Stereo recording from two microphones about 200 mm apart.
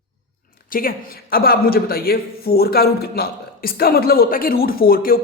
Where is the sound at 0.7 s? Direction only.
45° left (ahead or behind).